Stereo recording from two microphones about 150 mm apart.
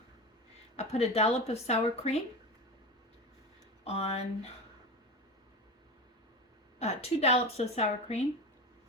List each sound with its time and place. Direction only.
0.8 s a woman's voice: 45° left (ahead or behind)
3.8 s a woman's voice: 45° left (ahead or behind)
6.7 s a woman's voice: 45° left (ahead or behind)